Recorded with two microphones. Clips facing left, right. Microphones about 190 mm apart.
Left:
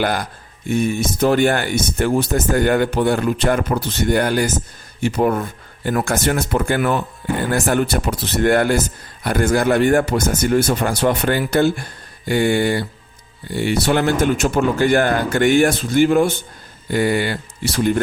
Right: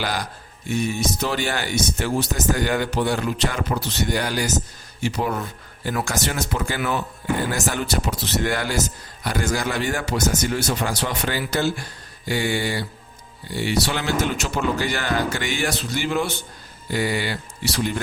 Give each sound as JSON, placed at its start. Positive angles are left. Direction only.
{"t": 0.0, "sound": "speech", "side_deg": 55}